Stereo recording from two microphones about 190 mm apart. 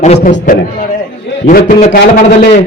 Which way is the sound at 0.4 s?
50° left (ahead or behind).